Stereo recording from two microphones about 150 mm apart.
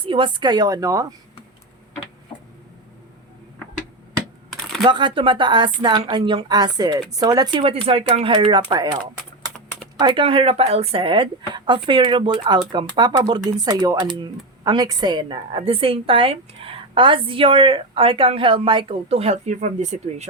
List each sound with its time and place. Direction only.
0.0 s speech: 35° right (ahead or behind)
4.8 s a woman's voice: 30° right (ahead or behind)
10.0 s a woman's voice: 30° right (ahead or behind); by 20.2 s 50° right (ahead or behind)